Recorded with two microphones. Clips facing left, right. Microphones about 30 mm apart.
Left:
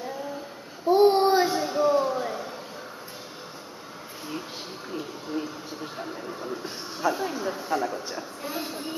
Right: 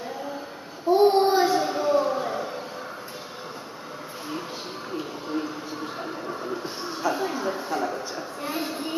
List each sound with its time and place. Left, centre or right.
0.8 s a sound: centre
4.9 s television: centre
5.9 s speech: centre
8.4 s speech: right